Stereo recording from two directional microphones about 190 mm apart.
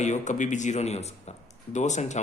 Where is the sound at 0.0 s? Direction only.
40° left (ahead or behind).